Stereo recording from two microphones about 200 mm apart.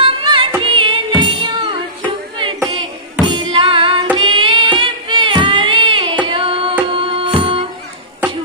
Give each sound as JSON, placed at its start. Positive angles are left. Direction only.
{"t": 0.0, "sound": "music", "side_deg": -25}